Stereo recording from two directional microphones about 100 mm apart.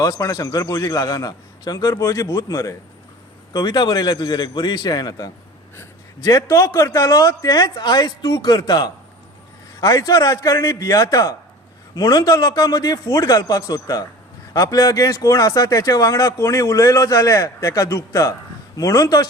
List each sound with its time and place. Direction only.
0.0 s a man's voice: 40° left (ahead or behind)
3.5 s a man's voice: 45° left (ahead or behind)
5.7 s a man's voice: 25° left (ahead or behind); by 8.9 s 45° left (ahead or behind)
9.8 s a man's voice: 35° left (ahead or behind)